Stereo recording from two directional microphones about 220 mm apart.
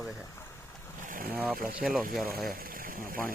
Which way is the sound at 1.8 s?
Centre (ahead or behind).